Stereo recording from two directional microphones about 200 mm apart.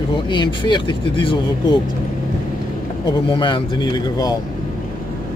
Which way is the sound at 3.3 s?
25° left (ahead or behind).